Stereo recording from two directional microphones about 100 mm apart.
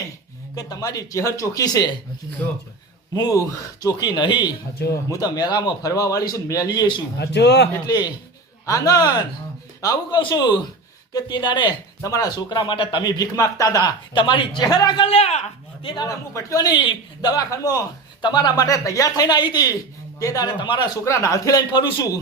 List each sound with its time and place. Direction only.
0.5 s a man's voice: 40° left (ahead or behind)
3.2 s a man's voice: 35° left (ahead or behind)
10.2 s a man's voice: 50° left (ahead or behind)
12.0 s a man's voice: 35° left (ahead or behind)
14.1 s a man's voice: 55° left (ahead or behind)
15.0 s a man's voice: 85° left
15.8 s a man's voice: 50° left (ahead or behind)
16.0 s a man's voice: 30° left (ahead or behind)
18.2 s a man's voice: 45° left (ahead or behind)
21.0 s a man's voice: 30° left (ahead or behind)